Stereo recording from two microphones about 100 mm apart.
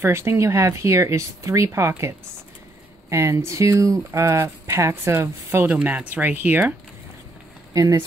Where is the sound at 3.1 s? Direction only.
25° right (ahead or behind).